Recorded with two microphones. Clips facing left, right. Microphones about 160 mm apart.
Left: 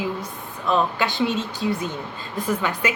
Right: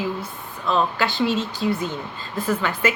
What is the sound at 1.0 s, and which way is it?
A woman's voice, 15° left (ahead or behind).